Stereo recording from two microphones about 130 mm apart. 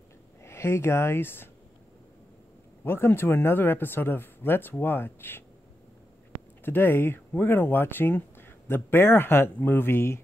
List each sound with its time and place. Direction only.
0.4 s speech: 20° left (ahead or behind)
2.8 s speech: 15° left (ahead or behind)
6.6 s speech: 15° left (ahead or behind)